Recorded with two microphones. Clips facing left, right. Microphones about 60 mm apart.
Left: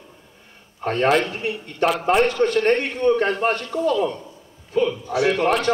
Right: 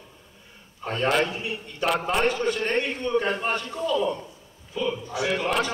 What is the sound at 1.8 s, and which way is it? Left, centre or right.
A man's voice, left.